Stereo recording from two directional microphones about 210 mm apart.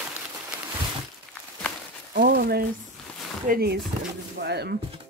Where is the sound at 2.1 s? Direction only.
45° right (ahead or behind).